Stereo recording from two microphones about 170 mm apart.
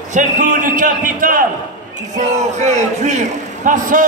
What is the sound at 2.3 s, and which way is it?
A man's voice, 45° right (ahead or behind).